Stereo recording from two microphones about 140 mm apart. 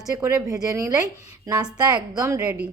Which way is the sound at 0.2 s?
20° right (ahead or behind).